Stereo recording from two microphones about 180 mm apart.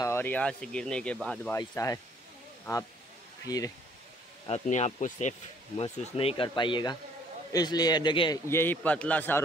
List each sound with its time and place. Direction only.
0.0 s speech: 15° left (ahead or behind)
1.5 s a man's voice: 20° left (ahead or behind)
3.4 s speech: 20° left (ahead or behind)
4.5 s speech: 40° left (ahead or behind)
8.5 s a man's voice: 10° left (ahead or behind)